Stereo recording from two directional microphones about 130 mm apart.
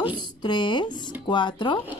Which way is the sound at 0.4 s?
35° left (ahead or behind).